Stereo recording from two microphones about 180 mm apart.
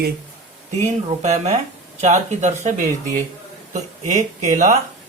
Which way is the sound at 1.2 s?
40° right (ahead or behind).